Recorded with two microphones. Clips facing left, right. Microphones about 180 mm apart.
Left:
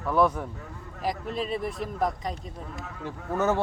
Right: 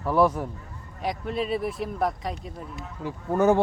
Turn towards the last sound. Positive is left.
turn(degrees=-15)  # may be behind; listen again after turning